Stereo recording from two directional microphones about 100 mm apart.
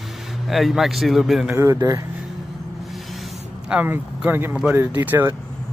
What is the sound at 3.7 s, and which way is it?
Speech, 15° right (ahead or behind).